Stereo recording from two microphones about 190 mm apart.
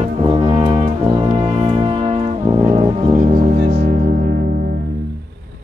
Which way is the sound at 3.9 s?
45° right (ahead or behind).